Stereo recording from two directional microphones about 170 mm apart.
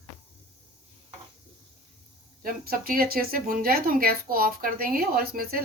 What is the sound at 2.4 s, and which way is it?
Speech, 60° right (ahead or behind).